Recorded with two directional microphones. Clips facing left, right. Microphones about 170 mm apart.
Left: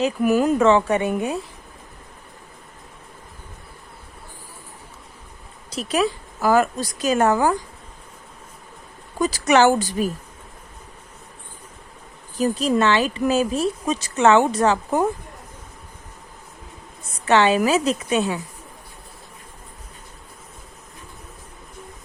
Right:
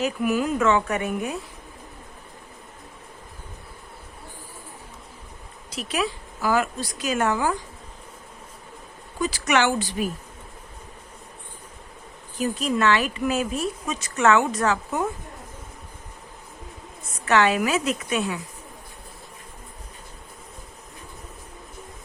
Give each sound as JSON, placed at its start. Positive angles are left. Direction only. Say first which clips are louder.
{"t": 0.3, "sound": "a woman's voice", "louder": "left 6 dB", "side_deg": 40}
{"t": 5.7, "sound": "speech", "louder": "left 5 dB", "side_deg": 40}
{"t": 9.1, "sound": "speech", "louder": "left 5 dB", "side_deg": 40}
{"t": 12.4, "sound": "speech", "louder": "left 4 dB", "side_deg": 35}
{"t": 17.2, "sound": "a woman's voice", "louder": "left 3 dB", "side_deg": 25}